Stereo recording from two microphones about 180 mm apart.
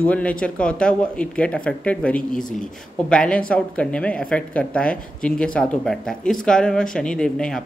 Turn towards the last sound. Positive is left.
turn(degrees=5)  # may be behind; listen again after turning